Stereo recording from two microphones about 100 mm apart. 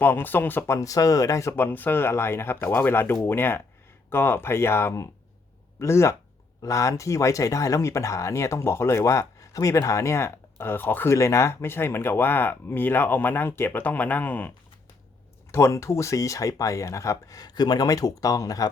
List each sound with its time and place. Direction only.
0.0 s speech: 20° left (ahead or behind)
0.8 s speech: 35° left (ahead or behind); by 14.5 s 15° left (ahead or behind)
15.5 s speech: 30° left (ahead or behind)